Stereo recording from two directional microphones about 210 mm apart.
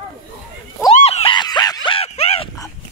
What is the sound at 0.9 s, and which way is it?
Screaming, 30° left (ahead or behind).